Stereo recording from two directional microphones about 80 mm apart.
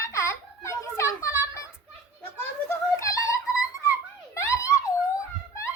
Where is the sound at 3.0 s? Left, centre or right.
Left.